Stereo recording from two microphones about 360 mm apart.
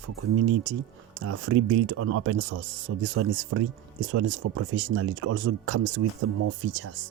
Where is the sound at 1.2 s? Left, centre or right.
Right.